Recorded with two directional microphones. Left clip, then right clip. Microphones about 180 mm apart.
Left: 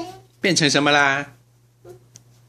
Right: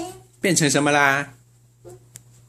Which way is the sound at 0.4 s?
Centre (ahead or behind).